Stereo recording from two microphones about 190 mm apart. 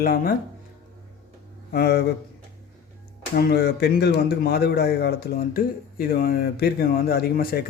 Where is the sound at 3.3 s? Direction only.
55° left (ahead or behind).